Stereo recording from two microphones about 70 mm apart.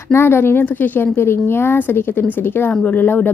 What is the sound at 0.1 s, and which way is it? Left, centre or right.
A woman's voice, left.